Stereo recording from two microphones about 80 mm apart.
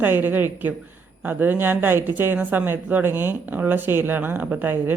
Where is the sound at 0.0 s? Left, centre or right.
Right.